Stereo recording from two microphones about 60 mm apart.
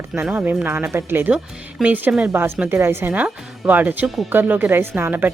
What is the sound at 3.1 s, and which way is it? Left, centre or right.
A woman's voice, right.